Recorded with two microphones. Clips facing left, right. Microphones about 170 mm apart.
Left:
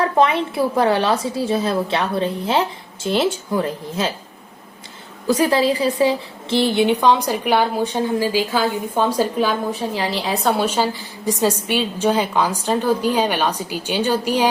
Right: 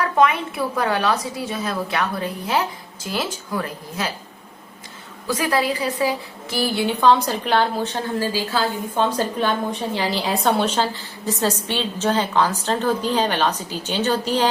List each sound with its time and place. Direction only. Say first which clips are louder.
0.0 s a woman's voice: left 2 dB; 30° left (ahead or behind)
5.3 s a woman's voice: left 5 dB; 30° left (ahead or behind); by 14.4 s 10° left (ahead or behind)